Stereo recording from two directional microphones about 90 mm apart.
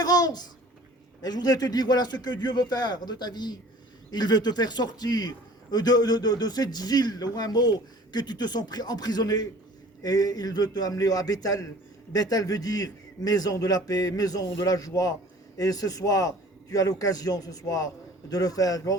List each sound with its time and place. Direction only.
0.0 s babbling: 45° left (ahead or behind)
1.2 s a man's voice: 50° left (ahead or behind)